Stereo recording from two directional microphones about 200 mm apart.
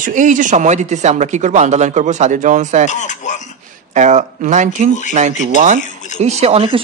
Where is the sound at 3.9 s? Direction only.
35° right (ahead or behind).